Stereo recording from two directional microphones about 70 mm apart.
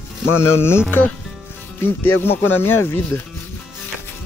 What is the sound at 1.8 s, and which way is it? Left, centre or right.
Speech, left.